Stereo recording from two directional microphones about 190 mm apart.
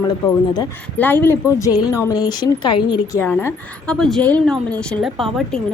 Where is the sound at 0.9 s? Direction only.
10° left (ahead or behind).